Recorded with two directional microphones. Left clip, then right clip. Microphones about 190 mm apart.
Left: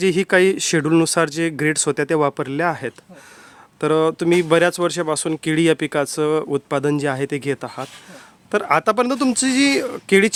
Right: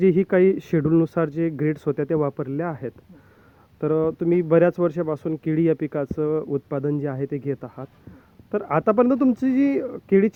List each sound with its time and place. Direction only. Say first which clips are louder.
0.1 s speech: left 3 dB; 5° left (ahead or behind)